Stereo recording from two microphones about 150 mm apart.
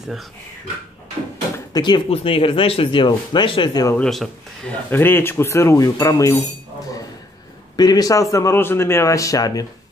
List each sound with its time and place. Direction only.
1.7 s speech: 30° left (ahead or behind)
3.9 s speech: 5° left (ahead or behind)
4.9 s speech: 15° left (ahead or behind)
7.7 s speech: 25° left (ahead or behind)